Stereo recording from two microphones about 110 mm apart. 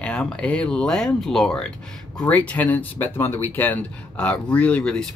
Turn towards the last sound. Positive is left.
turn(degrees=10)  # may be behind; listen again after turning